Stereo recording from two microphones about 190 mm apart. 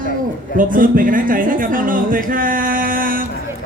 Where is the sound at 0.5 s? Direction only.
45° right (ahead or behind).